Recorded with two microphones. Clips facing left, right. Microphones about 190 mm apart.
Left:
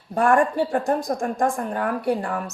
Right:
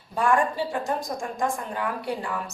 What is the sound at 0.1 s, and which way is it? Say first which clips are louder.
A woman's voice: left 4 dB; 55° left (ahead or behind).